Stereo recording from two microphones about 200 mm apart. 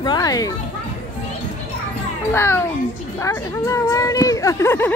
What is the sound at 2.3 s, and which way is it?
Speech, 10° left (ahead or behind).